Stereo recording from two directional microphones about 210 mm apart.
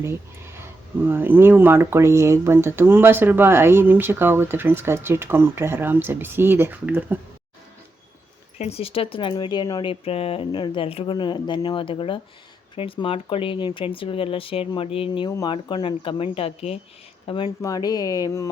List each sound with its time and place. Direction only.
0.0 s speech: 10° right (ahead or behind)
8.5 s speech: 30° left (ahead or behind)